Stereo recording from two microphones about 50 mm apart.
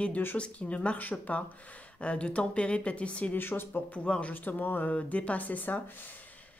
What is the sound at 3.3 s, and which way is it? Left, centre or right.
Speech, left.